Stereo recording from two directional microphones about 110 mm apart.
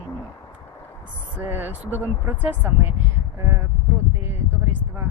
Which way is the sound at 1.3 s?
15° right (ahead or behind).